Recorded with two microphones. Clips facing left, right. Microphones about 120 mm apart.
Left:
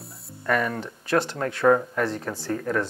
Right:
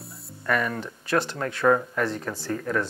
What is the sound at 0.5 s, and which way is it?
Speech, 35° left (ahead or behind).